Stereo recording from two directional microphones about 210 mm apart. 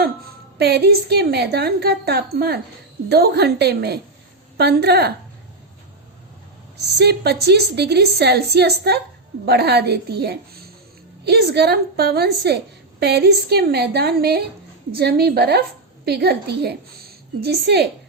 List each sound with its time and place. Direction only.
0.0 s a woman's voice: 50° right (ahead or behind)
7.0 s a woman's voice: 50° right (ahead or behind)